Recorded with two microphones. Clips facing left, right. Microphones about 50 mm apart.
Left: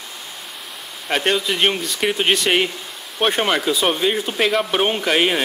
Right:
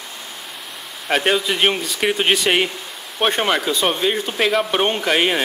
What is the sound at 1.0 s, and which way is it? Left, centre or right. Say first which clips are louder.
Speech: right 1 dB; centre.